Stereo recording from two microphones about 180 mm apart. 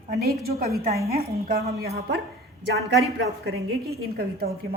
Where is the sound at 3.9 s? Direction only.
60° right (ahead or behind).